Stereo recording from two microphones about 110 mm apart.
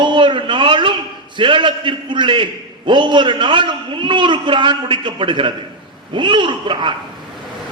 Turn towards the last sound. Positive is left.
turn(degrees=-45)  # may be behind; listen again after turning